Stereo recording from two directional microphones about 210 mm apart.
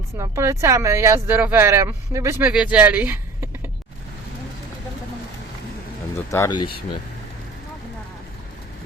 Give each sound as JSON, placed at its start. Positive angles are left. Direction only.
{"t": 0.2, "sound": "speech", "side_deg": -15}
{"t": 6.3, "sound": "speech", "side_deg": 15}